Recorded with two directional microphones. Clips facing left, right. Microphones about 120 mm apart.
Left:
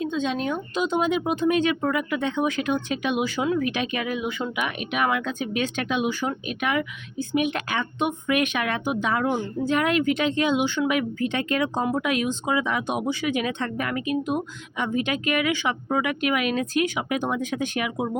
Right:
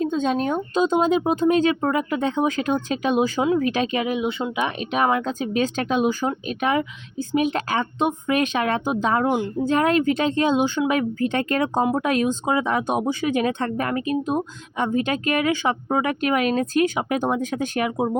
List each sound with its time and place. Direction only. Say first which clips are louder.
0.0 s speech: right 4 dB; 45° right (ahead or behind)
3.4 s speech: right 4 dB; 25° right (ahead or behind)
4.0 s speech: right 4 dB; 20° right (ahead or behind)